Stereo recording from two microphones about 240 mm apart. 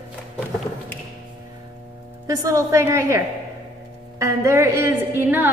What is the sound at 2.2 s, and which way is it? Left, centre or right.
A woman's voice, centre.